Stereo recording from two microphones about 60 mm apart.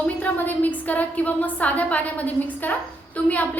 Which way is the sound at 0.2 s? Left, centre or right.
Left.